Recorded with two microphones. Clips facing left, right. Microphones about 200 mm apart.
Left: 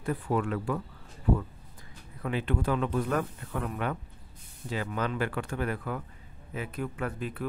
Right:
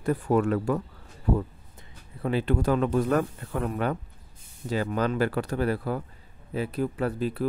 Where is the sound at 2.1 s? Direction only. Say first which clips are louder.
Right 5 dB; 35° right (ahead or behind).